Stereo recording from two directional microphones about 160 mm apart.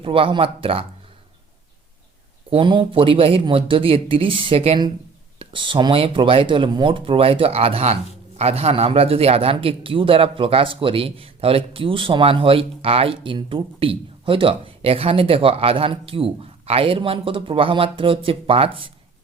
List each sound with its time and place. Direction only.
0.0 s a man's voice: 35° right (ahead or behind)
2.5 s a man's voice: 30° right (ahead or behind)